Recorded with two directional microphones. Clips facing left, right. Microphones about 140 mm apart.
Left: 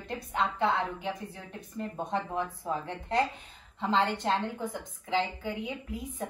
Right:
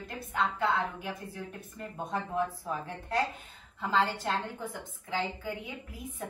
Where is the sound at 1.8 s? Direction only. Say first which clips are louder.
Left 3 dB; 20° left (ahead or behind).